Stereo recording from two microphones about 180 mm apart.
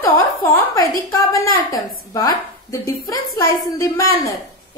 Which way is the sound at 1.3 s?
20° left (ahead or behind).